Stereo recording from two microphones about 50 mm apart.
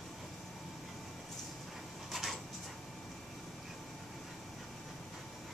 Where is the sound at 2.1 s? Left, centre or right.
Centre.